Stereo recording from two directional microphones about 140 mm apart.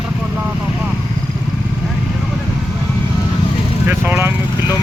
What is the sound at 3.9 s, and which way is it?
Vehicle, 15° right (ahead or behind).